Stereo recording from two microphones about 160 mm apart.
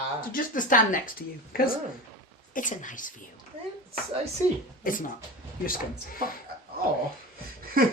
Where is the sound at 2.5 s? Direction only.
55° left (ahead or behind).